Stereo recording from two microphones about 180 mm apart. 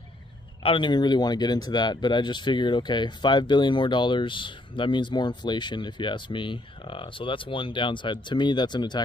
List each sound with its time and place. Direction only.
0.7 s speech: 25° left (ahead or behind)